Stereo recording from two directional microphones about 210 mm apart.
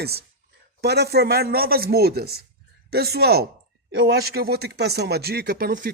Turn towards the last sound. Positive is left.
turn(degrees=-45)  # may be behind; listen again after turning